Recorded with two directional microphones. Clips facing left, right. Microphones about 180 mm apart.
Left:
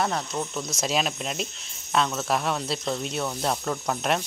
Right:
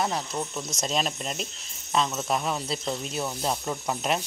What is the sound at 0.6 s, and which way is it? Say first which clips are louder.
Speech: left 2 dB; 5° left (ahead or behind).